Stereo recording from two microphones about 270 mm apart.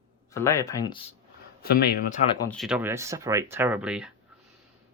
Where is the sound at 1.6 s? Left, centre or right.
Left.